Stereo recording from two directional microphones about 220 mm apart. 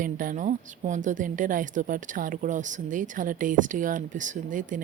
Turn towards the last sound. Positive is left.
turn(degrees=-35)  # may be behind; listen again after turning